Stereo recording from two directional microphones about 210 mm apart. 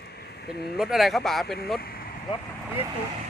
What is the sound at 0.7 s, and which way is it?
Speech, centre (ahead or behind).